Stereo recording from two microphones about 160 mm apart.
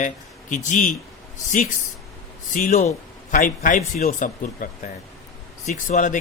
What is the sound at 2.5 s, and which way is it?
Speech, 50° left (ahead or behind).